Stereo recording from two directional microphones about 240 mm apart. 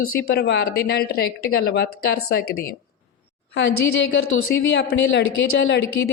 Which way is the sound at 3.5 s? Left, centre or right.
Left.